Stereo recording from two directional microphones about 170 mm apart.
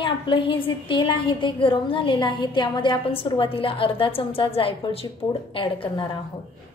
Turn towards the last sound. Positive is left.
turn(degrees=30)  # may be behind; listen again after turning